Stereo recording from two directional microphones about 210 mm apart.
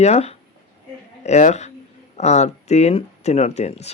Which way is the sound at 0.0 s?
30° left (ahead or behind).